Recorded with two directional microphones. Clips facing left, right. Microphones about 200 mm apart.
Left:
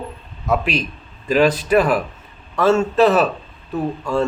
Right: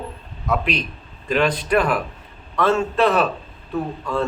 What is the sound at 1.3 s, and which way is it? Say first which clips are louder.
A man's voice: left 4 dB; 5° left (ahead or behind).